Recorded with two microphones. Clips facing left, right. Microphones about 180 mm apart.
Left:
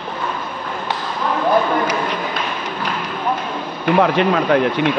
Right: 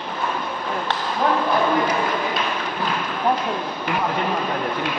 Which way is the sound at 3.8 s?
85° left.